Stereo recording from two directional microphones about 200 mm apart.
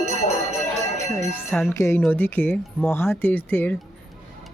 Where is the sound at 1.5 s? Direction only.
10° left (ahead or behind).